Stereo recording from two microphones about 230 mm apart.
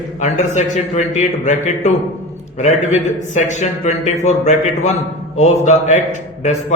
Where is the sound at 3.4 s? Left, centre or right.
Left.